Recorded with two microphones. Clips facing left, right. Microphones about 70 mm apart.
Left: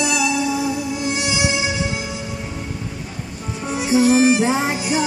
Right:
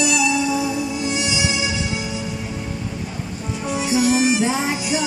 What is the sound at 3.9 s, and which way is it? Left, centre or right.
Music, left.